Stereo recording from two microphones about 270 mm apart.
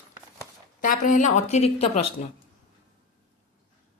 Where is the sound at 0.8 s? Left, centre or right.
Left.